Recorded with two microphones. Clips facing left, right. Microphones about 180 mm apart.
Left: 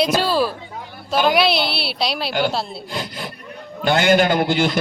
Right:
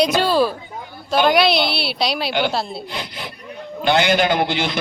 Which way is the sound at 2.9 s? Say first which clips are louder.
Left 2 dB; 45° left (ahead or behind).